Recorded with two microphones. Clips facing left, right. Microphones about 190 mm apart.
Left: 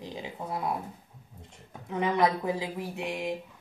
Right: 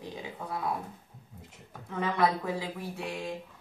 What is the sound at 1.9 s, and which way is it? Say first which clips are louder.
Speech: left 2 dB; 20° left (ahead or behind).